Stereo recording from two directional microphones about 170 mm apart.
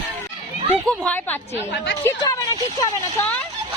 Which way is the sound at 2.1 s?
20° left (ahead or behind).